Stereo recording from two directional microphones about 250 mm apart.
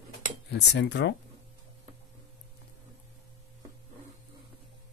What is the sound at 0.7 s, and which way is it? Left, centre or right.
Speech, left.